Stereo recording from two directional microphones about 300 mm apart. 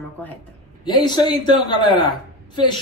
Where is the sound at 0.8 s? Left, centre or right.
Centre.